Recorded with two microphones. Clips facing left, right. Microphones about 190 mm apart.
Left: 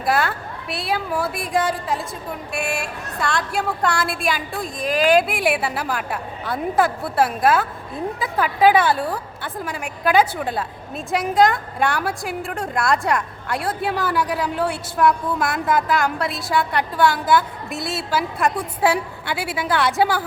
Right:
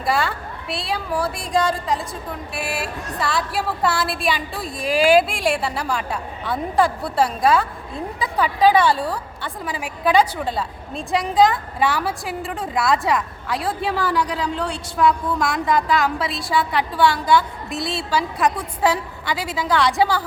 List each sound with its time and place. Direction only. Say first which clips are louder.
0.0 s a woman's voice: left 1 dB; centre (ahead or behind)